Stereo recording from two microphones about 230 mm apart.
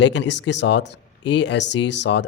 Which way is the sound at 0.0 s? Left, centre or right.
Left.